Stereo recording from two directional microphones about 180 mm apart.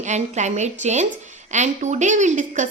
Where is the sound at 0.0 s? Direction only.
40° right (ahead or behind).